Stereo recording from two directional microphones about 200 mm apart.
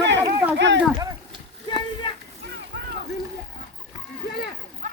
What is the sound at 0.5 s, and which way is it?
Speech, 60° right (ahead or behind).